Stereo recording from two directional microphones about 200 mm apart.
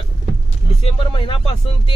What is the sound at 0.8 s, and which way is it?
Speech, 25° left (ahead or behind).